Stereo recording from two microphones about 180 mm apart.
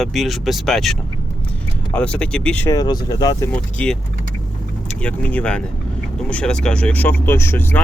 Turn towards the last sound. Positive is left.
turn(degrees=10)  # may be behind; listen again after turning